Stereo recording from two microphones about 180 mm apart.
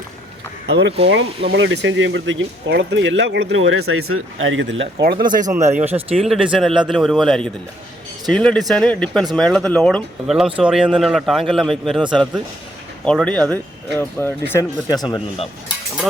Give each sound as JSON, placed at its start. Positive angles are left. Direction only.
{"t": 0.7, "sound": "speech", "side_deg": -80}
{"t": 1.0, "sound": "speech", "side_deg": -70}
{"t": 5.5, "sound": "speech", "side_deg": -15}
{"t": 6.1, "sound": "a man's voice", "side_deg": 0}
{"t": 14.9, "sound": "speech", "side_deg": 25}